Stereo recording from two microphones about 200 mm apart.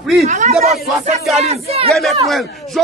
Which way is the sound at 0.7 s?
Centre (ahead or behind).